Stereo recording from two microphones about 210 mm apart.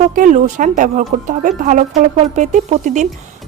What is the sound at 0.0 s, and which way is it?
Speech, 35° right (ahead or behind).